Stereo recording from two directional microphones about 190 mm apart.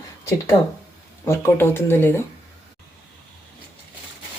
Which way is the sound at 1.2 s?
15° left (ahead or behind).